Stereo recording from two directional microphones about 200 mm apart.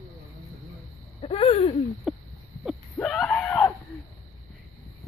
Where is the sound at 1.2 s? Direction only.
30° left (ahead or behind).